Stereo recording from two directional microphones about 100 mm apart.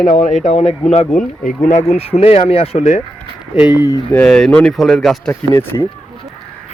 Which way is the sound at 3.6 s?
45° left (ahead or behind).